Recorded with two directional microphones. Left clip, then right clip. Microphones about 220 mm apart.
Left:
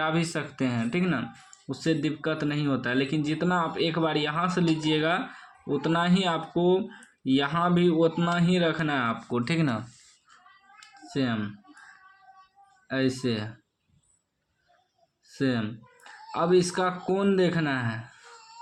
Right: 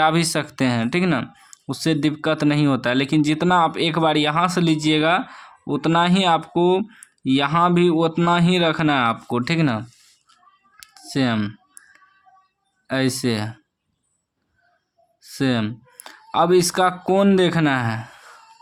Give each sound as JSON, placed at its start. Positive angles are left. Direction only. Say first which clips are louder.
{"t": 0.0, "sound": "speech", "louder": "right 9 dB", "side_deg": -35}
{"t": 10.8, "sound": "clicking", "louder": "right 7 dB", "side_deg": -40}
{"t": 12.9, "sound": "speech", "louder": "right 6 dB", "side_deg": -40}
{"t": 15.2, "sound": "speech", "louder": "right 6 dB", "side_deg": -40}